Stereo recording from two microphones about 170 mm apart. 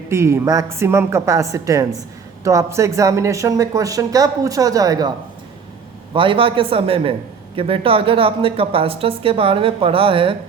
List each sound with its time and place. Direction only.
0.1 s a woman's voice: 15° right (ahead or behind)
6.1 s a man's voice: 30° right (ahead or behind)